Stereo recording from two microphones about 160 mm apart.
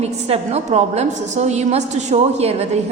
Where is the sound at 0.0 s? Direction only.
40° right (ahead or behind).